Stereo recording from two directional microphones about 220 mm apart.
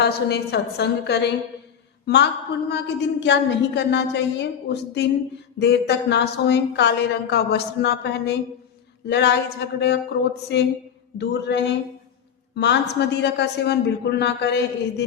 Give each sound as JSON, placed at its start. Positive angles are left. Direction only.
{"t": 0.0, "sound": "a woman's voice", "side_deg": 50}